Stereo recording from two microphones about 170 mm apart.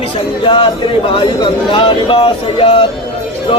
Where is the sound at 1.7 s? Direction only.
30° left (ahead or behind).